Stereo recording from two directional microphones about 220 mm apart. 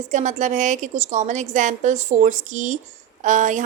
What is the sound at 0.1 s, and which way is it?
Speech, 35° right (ahead or behind).